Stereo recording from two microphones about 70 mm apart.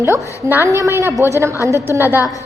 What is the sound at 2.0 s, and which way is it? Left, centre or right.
Speech, right.